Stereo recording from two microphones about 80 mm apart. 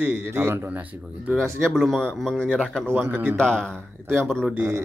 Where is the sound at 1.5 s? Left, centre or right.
Centre.